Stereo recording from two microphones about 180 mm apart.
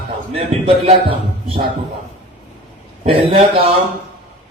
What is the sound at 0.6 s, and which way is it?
Speech, 30° right (ahead or behind).